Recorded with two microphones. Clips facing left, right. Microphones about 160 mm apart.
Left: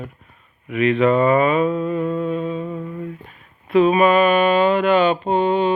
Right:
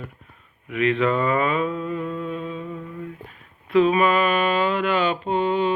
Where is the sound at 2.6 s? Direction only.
40° left (ahead or behind).